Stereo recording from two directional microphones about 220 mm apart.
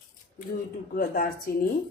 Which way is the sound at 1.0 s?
40° left (ahead or behind).